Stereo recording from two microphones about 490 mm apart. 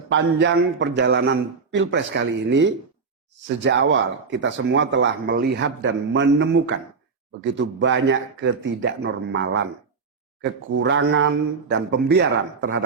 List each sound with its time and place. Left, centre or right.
0.1 s speech: right